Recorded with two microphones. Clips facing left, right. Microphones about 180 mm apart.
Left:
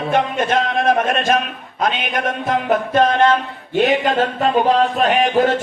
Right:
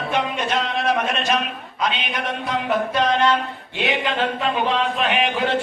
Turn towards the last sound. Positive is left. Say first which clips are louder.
# left 6 dB
turn(degrees=40)  # may be behind; listen again after turning